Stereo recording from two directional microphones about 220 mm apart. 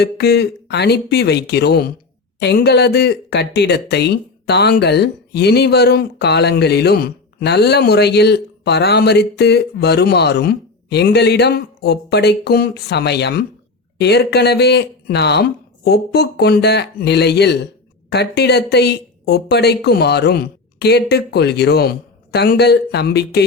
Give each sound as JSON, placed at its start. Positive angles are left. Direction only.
{"t": 0.0, "sound": "speech", "side_deg": 50}